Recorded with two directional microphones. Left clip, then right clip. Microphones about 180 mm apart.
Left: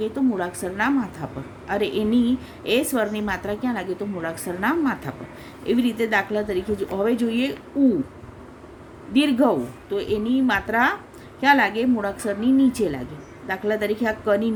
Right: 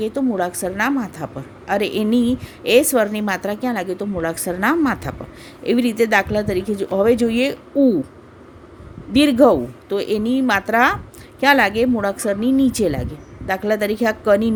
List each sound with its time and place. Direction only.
0.0 s a woman's voice: 45° right (ahead or behind)
9.1 s a woman's voice: 50° right (ahead or behind)